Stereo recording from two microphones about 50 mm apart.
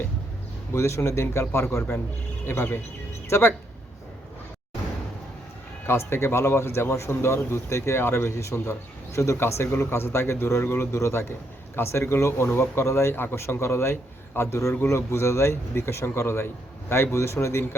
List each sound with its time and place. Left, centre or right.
0.7 s speech: left
2.5 s speech: left
3.2 s speech: left
5.8 s speech: left
9.1 s speech: left
9.4 s speech: left
14.8 s speech: left